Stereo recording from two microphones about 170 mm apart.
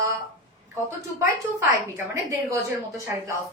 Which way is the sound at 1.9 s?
20° right (ahead or behind).